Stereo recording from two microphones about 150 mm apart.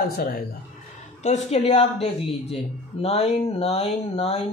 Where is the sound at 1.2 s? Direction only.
45° left (ahead or behind).